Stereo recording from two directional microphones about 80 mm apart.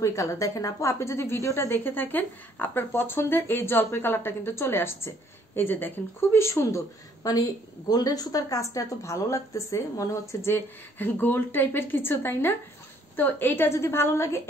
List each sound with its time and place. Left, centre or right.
0.0 s a woman's voice: left
1.7 s a woman's voice: left
7.9 s speech: left
10.5 s a woman's voice: left